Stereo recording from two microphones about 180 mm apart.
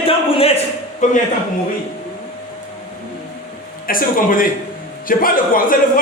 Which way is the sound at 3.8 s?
50° left (ahead or behind).